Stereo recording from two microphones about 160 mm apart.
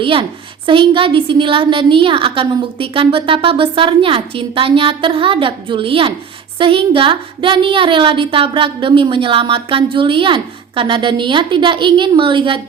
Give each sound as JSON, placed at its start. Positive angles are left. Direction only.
{"t": 0.0, "sound": "a woman's voice", "side_deg": -35}